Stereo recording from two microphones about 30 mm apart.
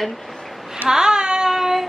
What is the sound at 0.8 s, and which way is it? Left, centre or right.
Child singing, right.